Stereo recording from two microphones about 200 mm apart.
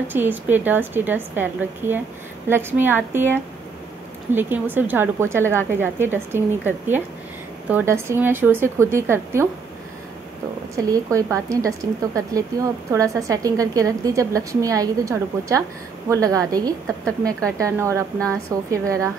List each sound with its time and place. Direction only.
0.1 s a woman's voice: 10° right (ahead or behind)
10.8 s a woman's voice: 15° right (ahead or behind)